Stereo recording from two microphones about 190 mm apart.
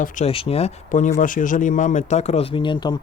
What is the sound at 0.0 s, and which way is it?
Speech, 45° left (ahead or behind).